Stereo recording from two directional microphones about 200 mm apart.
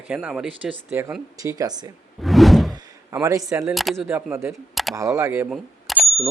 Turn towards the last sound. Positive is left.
turn(degrees=0)  # may be behind; listen again after turning